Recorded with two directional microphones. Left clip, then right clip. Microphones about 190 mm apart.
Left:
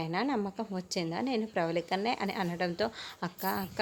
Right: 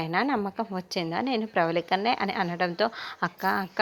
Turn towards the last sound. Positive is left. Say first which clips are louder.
# right 8 dB
turn(degrees=-5)  # may be behind; listen again after turning